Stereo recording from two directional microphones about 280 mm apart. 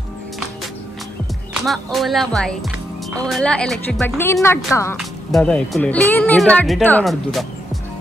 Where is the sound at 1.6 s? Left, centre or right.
Centre.